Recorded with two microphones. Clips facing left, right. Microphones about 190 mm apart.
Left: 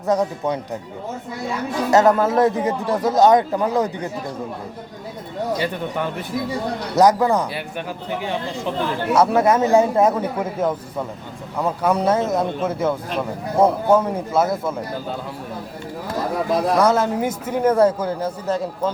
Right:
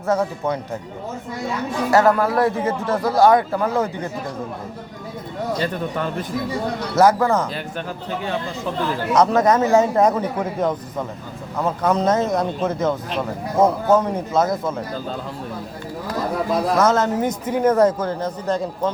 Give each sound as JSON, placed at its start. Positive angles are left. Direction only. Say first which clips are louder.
{"t": 0.1, "sound": "a man's voice", "louder": "left 1 dB", "side_deg": 15}
{"t": 1.9, "sound": "a man's voice", "louder": "left 1 dB", "side_deg": 20}
{"t": 5.5, "sound": "a man's voice", "louder": "even", "side_deg": 15}
{"t": 16.7, "sound": "a man's voice", "louder": "even", "side_deg": 10}